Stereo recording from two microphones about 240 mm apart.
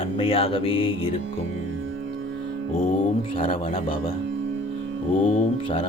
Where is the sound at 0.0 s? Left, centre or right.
Left.